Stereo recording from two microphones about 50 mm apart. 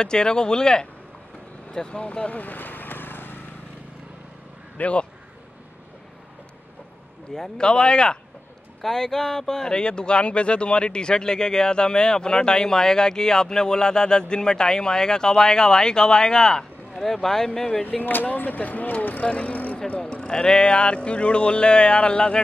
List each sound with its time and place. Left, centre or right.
0.0 s speech: centre
2.0 s vehicle: left
4.7 s speech: left
7.3 s speech: centre
18.0 s speech: left
20.0 s speech: centre